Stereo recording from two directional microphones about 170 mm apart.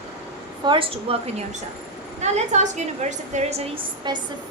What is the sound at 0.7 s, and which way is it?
Speech, 30° right (ahead or behind).